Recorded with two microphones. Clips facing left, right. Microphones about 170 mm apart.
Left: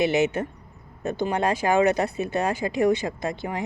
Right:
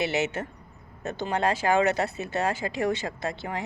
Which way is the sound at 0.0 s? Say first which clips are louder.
Left 5 dB; 15° left (ahead or behind).